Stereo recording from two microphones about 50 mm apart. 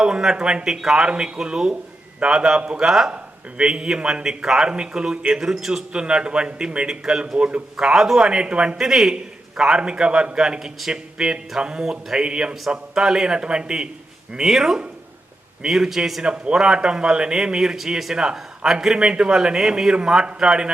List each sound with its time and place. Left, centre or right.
0.0 s a man's voice: centre
7.9 s a man's voice: centre
8.8 s a man's voice: centre
9.1 s a man's voice: centre
16.2 s a man's voice: centre